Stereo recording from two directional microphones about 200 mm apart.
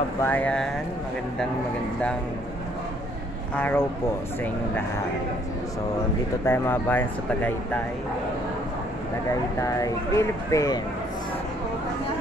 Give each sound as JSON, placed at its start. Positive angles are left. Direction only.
{"t": 0.2, "sound": "speech", "side_deg": 10}
{"t": 3.5, "sound": "speech", "side_deg": 10}
{"t": 6.4, "sound": "speech", "side_deg": 10}
{"t": 9.6, "sound": "speech", "side_deg": 15}